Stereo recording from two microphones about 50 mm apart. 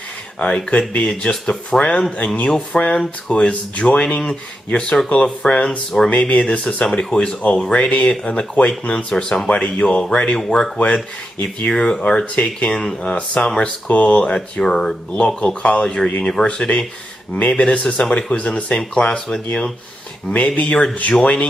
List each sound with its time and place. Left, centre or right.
0.4 s speech: centre
0.7 s speech: left
1.0 s speech: centre
12.4 s speech: left
14.6 s speech: centre
20.3 s speech: left